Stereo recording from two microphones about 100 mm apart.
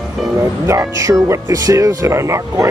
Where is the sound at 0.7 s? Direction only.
35° right (ahead or behind).